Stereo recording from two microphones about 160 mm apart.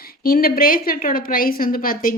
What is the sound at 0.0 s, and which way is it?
Speech, 70° left (ahead or behind).